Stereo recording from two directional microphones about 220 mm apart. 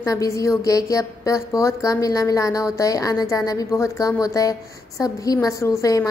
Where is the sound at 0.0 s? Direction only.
15° left (ahead or behind).